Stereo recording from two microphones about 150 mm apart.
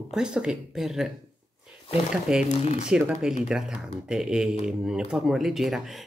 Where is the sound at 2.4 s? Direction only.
50° left (ahead or behind).